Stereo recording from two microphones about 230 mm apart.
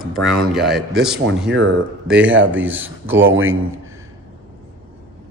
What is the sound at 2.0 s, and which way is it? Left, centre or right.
A man's voice, centre.